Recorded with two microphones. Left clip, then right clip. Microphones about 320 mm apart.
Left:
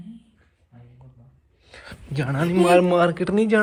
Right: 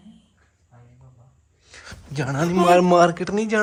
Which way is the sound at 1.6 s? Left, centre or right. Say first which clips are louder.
Even; centre.